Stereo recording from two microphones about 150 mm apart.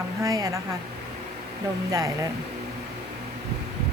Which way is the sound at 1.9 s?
25° right (ahead or behind).